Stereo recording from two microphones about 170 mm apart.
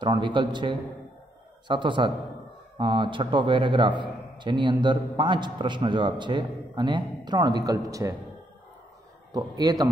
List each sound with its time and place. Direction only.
0.0 s a man's voice: 25° right (ahead or behind)
9.3 s a man's voice: 20° right (ahead or behind)